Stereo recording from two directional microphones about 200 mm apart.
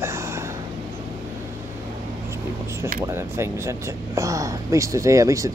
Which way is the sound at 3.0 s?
15° right (ahead or behind).